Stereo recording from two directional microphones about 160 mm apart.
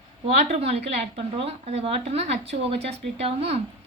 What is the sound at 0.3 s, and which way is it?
A woman's voice, 40° right (ahead or behind).